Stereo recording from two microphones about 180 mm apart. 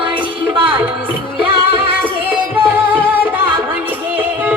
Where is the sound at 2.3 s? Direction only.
10° right (ahead or behind).